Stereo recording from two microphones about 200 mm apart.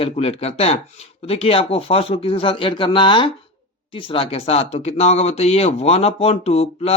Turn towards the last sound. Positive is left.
turn(degrees=30)  # may be behind; listen again after turning